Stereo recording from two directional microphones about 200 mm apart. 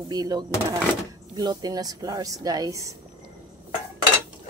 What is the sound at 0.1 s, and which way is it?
Speech, 20° right (ahead or behind).